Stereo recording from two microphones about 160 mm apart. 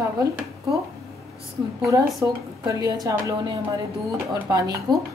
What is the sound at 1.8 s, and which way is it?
A woman's voice, 20° right (ahead or behind).